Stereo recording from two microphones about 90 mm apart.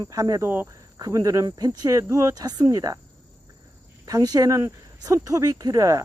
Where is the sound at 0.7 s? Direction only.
40° right (ahead or behind).